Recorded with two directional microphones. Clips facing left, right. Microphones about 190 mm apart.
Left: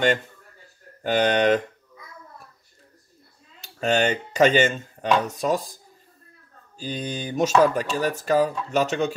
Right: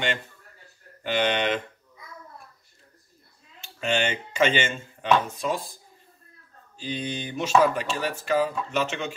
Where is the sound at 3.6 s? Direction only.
40° left (ahead or behind).